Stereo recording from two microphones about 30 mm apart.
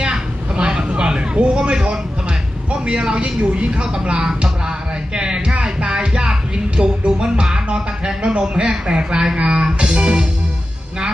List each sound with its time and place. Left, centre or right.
0.6 s vehicle: right
0.9 s a sound: right
2.8 s speech: right
3.5 s speech: right
4.1 s music: right
8.9 s speech: right
9.3 s music: right